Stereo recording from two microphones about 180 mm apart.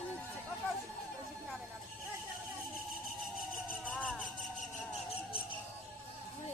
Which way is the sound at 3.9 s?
5° left (ahead or behind).